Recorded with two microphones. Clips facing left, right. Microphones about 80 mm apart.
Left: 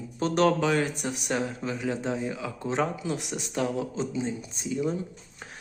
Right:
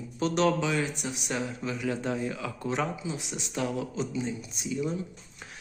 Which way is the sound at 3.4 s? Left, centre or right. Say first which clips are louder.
Left 1 dB; left.